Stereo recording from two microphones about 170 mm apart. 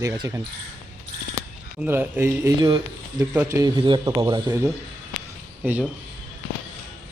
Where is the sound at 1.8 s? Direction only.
10° right (ahead or behind).